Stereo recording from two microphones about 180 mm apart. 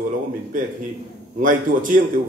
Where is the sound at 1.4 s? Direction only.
45° right (ahead or behind).